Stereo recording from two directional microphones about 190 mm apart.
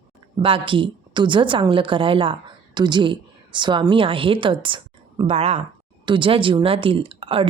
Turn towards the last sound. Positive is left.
turn(degrees=-30)  # may be behind; listen again after turning